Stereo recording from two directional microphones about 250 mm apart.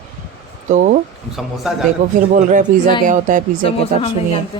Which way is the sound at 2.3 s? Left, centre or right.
Right.